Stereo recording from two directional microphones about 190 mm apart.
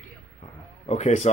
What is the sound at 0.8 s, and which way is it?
Speech, 35° left (ahead or behind).